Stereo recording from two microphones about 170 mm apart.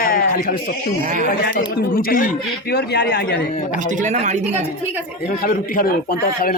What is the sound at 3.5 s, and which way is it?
Speech, 45° left (ahead or behind).